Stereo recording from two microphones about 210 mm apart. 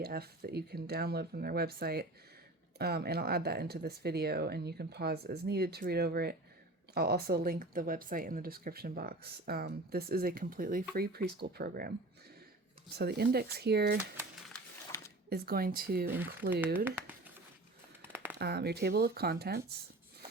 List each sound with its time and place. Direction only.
0.0 s speech: 45° right (ahead or behind)
13.0 s speech: 50° right (ahead or behind)
15.3 s speech: 45° right (ahead or behind)
16.1 s speech: 10° right (ahead or behind)
16.7 s a sound: 10° right (ahead or behind)
18.3 s speech: 50° right (ahead or behind)